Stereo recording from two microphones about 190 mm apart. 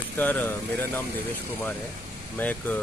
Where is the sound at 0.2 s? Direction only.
10° left (ahead or behind).